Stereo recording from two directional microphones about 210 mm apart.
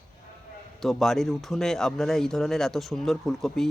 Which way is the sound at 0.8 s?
Centre (ahead or behind).